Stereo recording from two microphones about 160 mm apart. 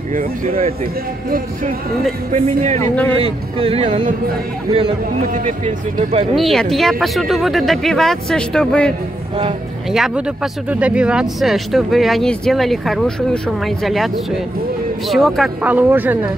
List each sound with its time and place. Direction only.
0.1 s speech: 55° right (ahead or behind)
2.3 s speech: 45° right (ahead or behind)
2.8 s speech: 10° left (ahead or behind)
3.5 s speech: 35° right (ahead or behind)
5.3 s speech: 55° right (ahead or behind)
6.3 s speech: centre (ahead or behind)
15.6 s speech: 10° right (ahead or behind)